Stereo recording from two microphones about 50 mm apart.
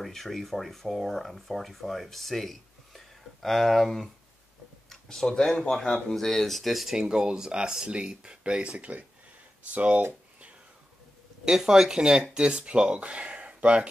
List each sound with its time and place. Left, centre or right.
0.0 s speech: centre
7.0 s speech: centre; by 10.0 s right
11.4 s speech: centre